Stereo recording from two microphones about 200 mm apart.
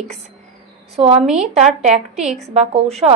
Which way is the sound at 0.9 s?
30° right (ahead or behind).